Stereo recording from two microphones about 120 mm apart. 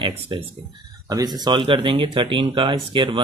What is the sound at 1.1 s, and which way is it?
Speech, 35° right (ahead or behind).